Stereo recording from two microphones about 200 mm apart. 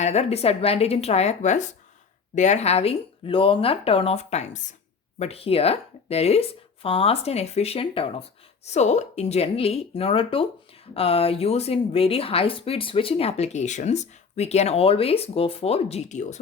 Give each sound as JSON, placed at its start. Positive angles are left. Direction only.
{"t": 0.0, "sound": "a woman's voice", "side_deg": 35}